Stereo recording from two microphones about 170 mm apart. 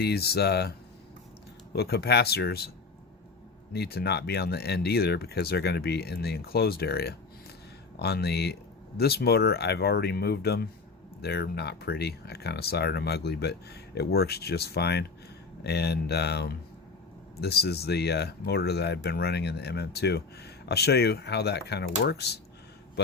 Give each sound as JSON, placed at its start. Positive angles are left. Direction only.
{"t": 0.0, "sound": "speech", "side_deg": 70}
{"t": 3.7, "sound": "speech", "side_deg": 70}